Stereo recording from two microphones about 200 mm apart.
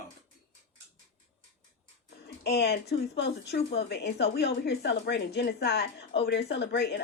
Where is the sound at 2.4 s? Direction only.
55° left (ahead or behind).